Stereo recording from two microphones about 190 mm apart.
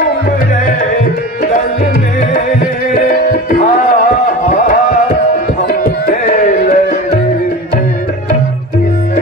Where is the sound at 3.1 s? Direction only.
45° left (ahead or behind).